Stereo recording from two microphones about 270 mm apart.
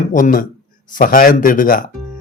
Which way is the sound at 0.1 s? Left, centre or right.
Left.